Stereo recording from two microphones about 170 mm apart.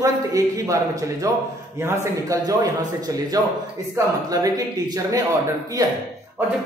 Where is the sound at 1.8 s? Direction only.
20° right (ahead or behind).